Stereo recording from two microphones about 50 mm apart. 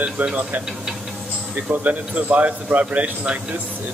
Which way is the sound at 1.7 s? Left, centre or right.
Right.